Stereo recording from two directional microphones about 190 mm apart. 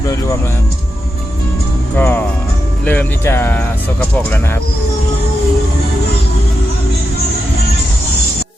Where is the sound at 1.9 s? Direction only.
10° left (ahead or behind).